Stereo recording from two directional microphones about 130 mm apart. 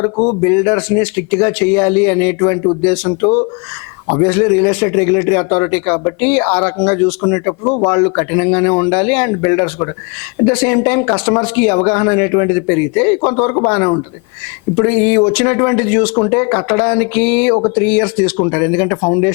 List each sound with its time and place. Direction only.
0.0 s speech: 20° left (ahead or behind)
3.2 s speech: 25° left (ahead or behind)